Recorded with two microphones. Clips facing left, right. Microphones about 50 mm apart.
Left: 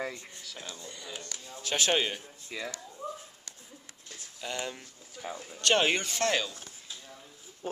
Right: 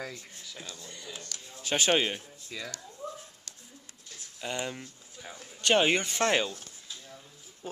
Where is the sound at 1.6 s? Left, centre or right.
Centre.